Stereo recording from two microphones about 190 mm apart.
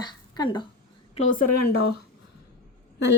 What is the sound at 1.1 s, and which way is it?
Speech, 45° left (ahead or behind).